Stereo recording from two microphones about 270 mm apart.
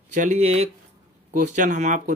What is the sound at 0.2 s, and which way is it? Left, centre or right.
Speech, right.